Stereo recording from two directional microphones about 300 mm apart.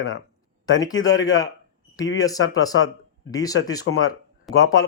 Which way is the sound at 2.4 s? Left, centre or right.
Left.